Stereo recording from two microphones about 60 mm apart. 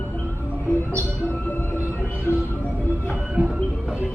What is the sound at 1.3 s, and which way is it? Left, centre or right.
Music, left.